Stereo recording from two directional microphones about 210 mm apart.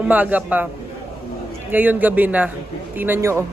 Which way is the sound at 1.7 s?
10° right (ahead or behind).